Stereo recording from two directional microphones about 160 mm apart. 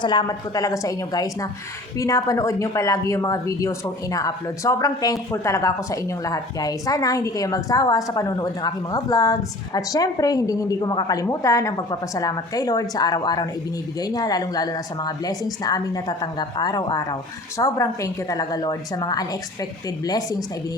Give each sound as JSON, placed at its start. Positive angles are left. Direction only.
{"t": 0.0, "sound": "speech", "side_deg": 30}